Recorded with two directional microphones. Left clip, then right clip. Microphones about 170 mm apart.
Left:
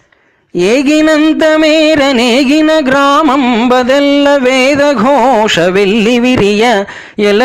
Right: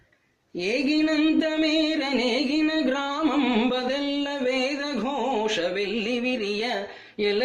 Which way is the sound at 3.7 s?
50° left (ahead or behind).